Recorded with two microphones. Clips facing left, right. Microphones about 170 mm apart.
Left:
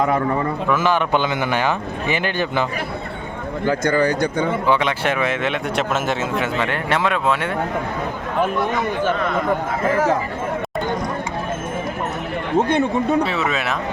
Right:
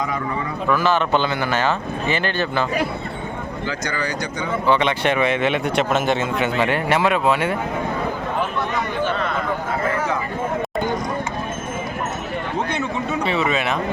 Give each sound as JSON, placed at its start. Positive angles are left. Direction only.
{"t": 0.0, "sound": "speech", "side_deg": 60}
{"t": 0.7, "sound": "speech", "side_deg": 15}
{"t": 3.7, "sound": "speech", "side_deg": 50}
{"t": 4.6, "sound": "speech", "side_deg": 5}
{"t": 12.5, "sound": "speech", "side_deg": 50}
{"t": 13.2, "sound": "speech", "side_deg": 0}